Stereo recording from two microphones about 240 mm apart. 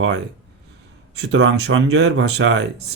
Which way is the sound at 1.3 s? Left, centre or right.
Right.